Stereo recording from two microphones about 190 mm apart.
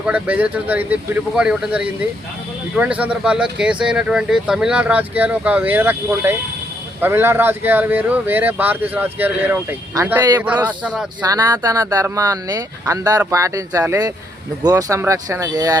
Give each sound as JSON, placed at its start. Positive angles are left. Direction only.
{"t": 0.0, "sound": "speech", "side_deg": -10}
{"t": 11.2, "sound": "speech", "side_deg": -20}